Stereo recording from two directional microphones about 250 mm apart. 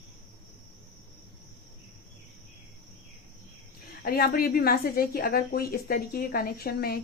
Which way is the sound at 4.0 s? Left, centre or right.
Left.